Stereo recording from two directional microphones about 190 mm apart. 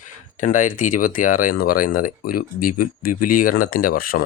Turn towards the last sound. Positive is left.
turn(degrees=50)  # may be behind; listen again after turning